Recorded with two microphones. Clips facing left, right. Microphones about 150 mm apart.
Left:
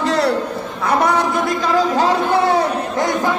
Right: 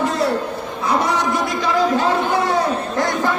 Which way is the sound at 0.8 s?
60° left (ahead or behind).